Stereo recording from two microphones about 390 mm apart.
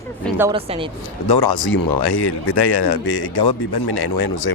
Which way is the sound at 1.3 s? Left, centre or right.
Left.